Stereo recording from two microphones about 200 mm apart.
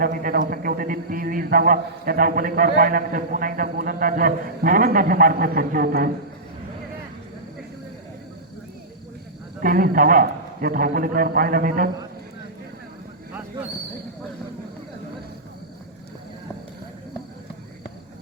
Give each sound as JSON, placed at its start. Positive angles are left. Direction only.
{"t": 0.0, "sound": "a man's voice", "side_deg": -45}
{"t": 9.6, "sound": "a man's voice", "side_deg": -45}